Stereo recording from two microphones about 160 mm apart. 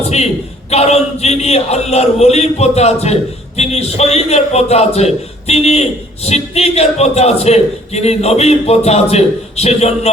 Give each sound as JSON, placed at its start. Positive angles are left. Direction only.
{"t": 0.0, "sound": "a man's voice", "side_deg": 40}